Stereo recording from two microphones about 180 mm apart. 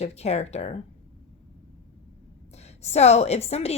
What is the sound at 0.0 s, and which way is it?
Speech, 35° left (ahead or behind).